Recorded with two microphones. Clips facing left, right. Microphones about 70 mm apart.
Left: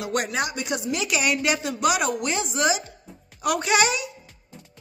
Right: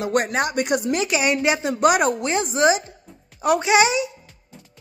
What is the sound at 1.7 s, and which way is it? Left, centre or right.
A child's voice, right.